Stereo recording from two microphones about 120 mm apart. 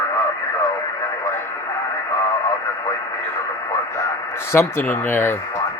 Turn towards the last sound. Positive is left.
turn(degrees=20)  # may be behind; listen again after turning